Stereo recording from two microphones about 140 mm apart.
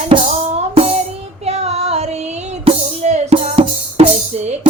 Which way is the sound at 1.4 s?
50° right (ahead or behind).